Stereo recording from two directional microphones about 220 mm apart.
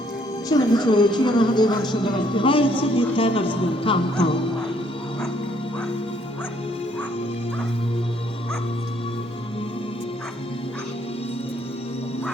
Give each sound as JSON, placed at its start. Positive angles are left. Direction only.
{"t": 0.4, "sound": "a woman's voice", "side_deg": 20}